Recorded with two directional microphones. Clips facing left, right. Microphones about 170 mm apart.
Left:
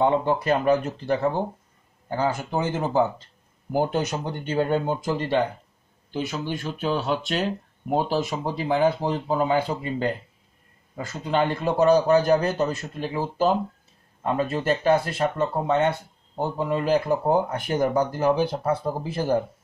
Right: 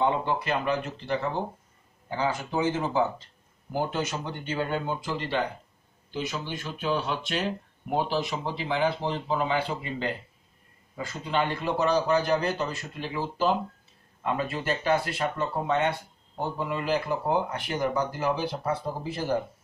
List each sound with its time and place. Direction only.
0.0 s speech: 45° left (ahead or behind)